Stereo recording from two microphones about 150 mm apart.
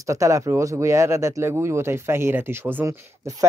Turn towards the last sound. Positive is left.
turn(degrees=-20)  # may be behind; listen again after turning